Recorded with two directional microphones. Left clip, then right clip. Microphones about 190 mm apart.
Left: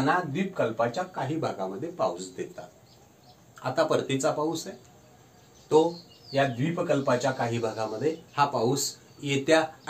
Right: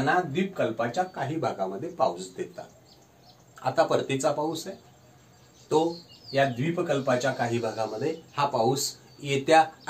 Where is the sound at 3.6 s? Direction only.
15° left (ahead or behind).